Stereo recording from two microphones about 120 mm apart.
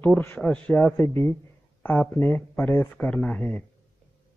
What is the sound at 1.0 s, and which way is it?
A man's voice, 20° left (ahead or behind).